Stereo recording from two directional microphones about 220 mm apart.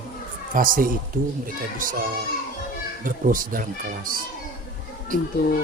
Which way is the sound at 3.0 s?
40° right (ahead or behind).